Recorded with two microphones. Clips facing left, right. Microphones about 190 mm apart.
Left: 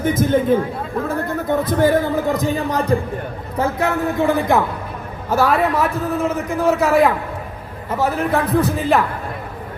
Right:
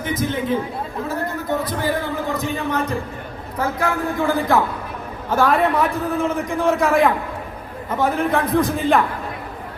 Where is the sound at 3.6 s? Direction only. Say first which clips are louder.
Left 3 dB; 25° left (ahead or behind); by 9.0 s 5° left (ahead or behind).